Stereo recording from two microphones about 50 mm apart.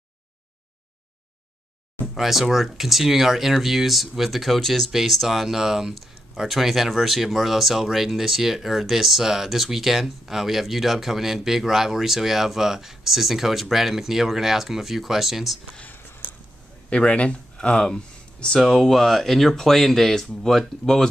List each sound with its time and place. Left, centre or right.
2.1 s speech: centre
15.9 s a sound: left
16.9 s speech: left
18.6 s speech: centre